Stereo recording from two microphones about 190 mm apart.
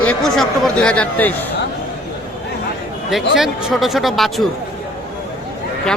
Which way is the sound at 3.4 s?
Centre (ahead or behind).